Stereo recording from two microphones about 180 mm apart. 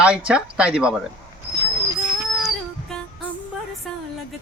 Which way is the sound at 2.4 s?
5° left (ahead or behind).